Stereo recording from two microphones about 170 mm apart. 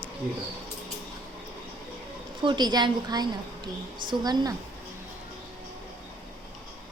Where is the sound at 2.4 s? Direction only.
25° right (ahead or behind).